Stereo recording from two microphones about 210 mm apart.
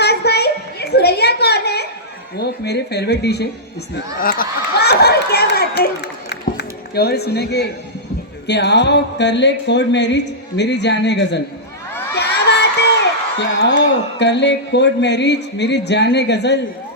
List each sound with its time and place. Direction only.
0.0 s a sound: 50° left (ahead or behind)
2.4 s speech: 50° left (ahead or behind)
12.1 s crowd: 50° left (ahead or behind)
13.6 s speech: 55° left (ahead or behind)